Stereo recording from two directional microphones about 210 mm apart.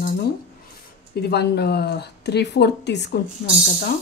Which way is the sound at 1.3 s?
50° left (ahead or behind).